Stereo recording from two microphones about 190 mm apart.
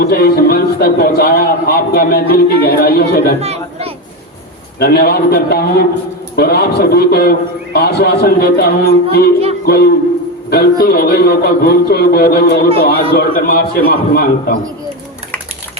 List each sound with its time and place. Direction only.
0.0 s a man's voice: 55° left (ahead or behind)
3.4 s chatter: 30° right (ahead or behind)
4.8 s a man's voice: 55° left (ahead or behind)